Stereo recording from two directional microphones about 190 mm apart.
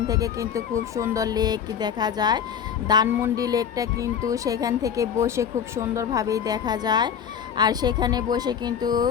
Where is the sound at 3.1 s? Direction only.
10° right (ahead or behind).